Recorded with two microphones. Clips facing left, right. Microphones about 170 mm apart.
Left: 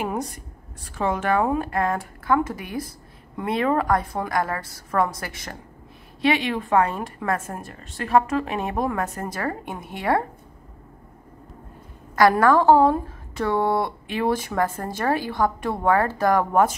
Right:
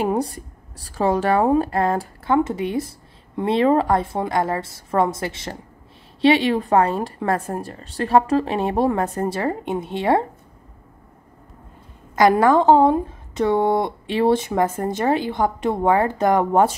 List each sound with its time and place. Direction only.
0.0 s a woman's voice: 30° right (ahead or behind)
12.2 s speech: 20° right (ahead or behind)